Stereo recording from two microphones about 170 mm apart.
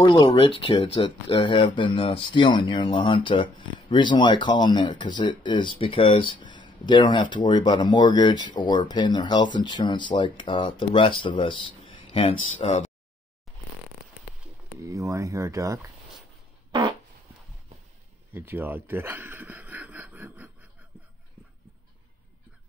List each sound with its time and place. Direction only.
0.0 s speech: 25° left (ahead or behind)
14.8 s speech: 20° right (ahead or behind)
18.3 s speech: 10° right (ahead or behind)